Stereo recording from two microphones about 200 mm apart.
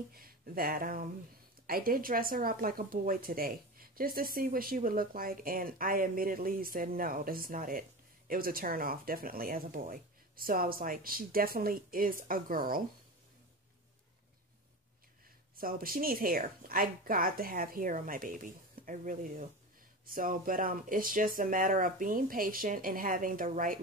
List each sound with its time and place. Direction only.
0.1 s a woman's voice: 45° right (ahead or behind)
15.5 s a woman's voice: 45° right (ahead or behind)